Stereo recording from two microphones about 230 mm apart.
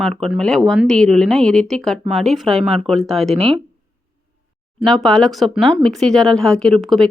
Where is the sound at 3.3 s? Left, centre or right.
Right.